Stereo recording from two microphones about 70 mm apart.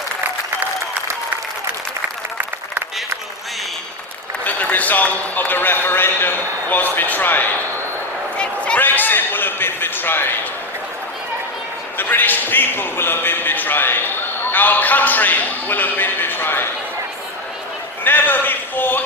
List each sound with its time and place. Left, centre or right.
4.4 s a man's voice: left
8.4 s a sound: centre
8.8 s speech: left
11.9 s speech: left
18.0 s speech: left